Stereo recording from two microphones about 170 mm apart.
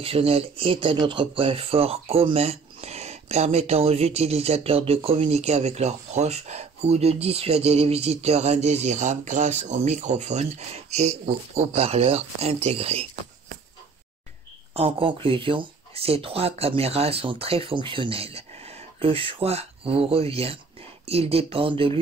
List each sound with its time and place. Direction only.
0.0 s speech: 35° right (ahead or behind)
14.7 s speech: 35° right (ahead or behind)